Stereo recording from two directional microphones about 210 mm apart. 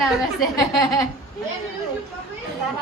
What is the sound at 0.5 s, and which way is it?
Speech, 15° left (ahead or behind).